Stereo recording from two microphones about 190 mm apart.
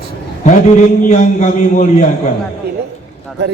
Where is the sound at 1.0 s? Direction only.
40° left (ahead or behind).